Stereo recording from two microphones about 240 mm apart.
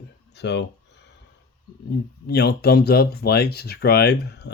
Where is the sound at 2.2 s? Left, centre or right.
Left.